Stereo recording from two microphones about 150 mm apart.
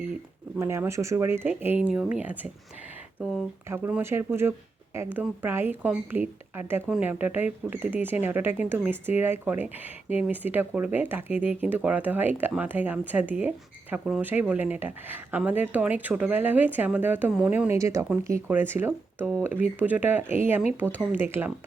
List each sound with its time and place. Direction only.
0.6 s speech: 15° right (ahead or behind)
3.7 s speech: 15° right (ahead or behind)
17.7 s speech: 20° right (ahead or behind)